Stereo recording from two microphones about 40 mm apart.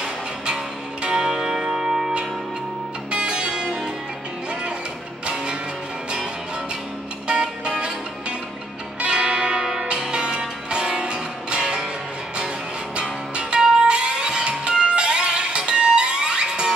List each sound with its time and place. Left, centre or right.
1.0 s music: centre
3.1 s music: right
5.2 s music: right
7.2 s music: right
13.6 s music: right